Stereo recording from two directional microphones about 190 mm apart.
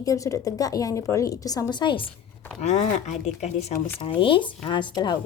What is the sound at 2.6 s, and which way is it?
Speech, 40° left (ahead or behind).